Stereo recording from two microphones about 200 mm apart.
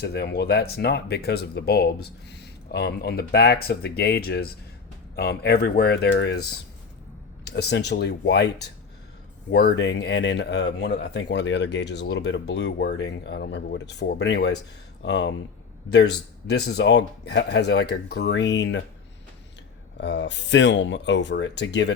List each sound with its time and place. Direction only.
0.0 s speech: 55° left (ahead or behind)
16.5 s speech: 55° left (ahead or behind)
20.0 s speech: 60° left (ahead or behind)